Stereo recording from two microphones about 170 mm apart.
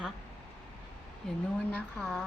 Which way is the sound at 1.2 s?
5° left (ahead or behind).